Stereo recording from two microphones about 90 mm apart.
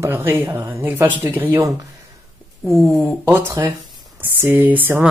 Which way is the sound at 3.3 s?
25° right (ahead or behind).